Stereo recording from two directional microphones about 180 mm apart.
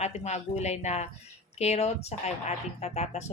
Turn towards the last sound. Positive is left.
turn(degrees=40)  # may be behind; listen again after turning